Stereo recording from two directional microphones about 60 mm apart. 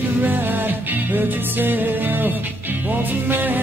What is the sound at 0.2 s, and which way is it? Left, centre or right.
Music, right.